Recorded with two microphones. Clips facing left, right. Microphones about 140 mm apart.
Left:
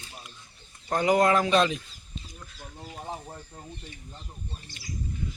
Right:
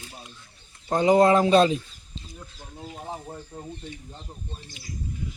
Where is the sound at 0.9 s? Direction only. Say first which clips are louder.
Right 4 dB; 25° right (ahead or behind).